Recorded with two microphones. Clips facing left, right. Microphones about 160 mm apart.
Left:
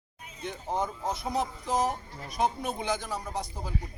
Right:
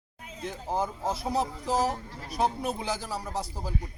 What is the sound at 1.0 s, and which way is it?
Speech, 30° right (ahead or behind).